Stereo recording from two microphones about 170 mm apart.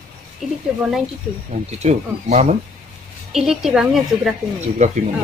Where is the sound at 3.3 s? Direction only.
5° right (ahead or behind).